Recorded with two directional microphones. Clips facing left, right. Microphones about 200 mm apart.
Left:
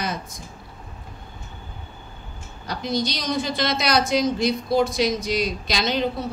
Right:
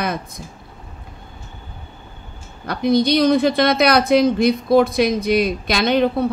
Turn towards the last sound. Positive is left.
turn(degrees=-55)  # may be behind; listen again after turning